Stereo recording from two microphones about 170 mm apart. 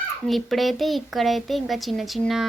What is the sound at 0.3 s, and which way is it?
Speech, centre (ahead or behind).